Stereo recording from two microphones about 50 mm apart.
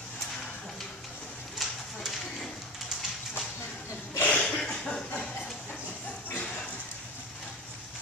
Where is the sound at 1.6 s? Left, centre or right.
Centre.